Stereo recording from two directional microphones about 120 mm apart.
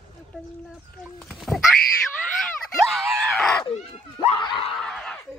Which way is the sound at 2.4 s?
Centre (ahead or behind).